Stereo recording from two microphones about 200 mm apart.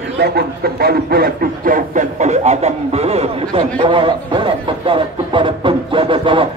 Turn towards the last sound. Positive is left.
turn(degrees=-25)  # may be behind; listen again after turning